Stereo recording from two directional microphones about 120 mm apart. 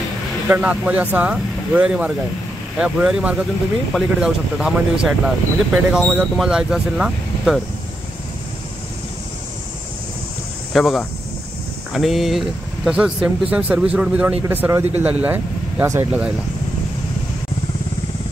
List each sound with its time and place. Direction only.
0.5 s speech: 10° right (ahead or behind)
10.7 s speech: centre (ahead or behind); by 16.1 s 20° right (ahead or behind)